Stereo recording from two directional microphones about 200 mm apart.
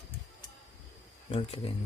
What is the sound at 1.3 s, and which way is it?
Speech, 30° left (ahead or behind).